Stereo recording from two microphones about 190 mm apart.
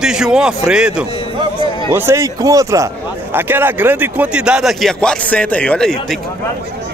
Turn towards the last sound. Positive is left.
turn(degrees=5)  # may be behind; listen again after turning